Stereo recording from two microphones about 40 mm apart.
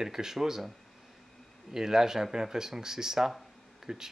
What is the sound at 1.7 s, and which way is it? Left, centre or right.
Speech, centre.